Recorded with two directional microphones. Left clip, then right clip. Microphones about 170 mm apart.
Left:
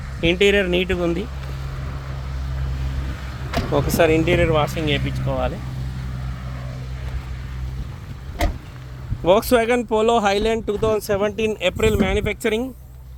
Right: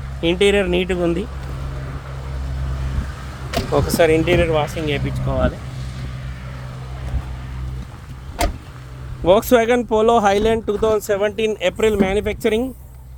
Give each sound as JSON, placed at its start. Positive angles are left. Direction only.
{"t": 0.2, "sound": "speech", "side_deg": 5}
{"t": 3.8, "sound": "speech", "side_deg": -10}
{"t": 9.2, "sound": "speech", "side_deg": -10}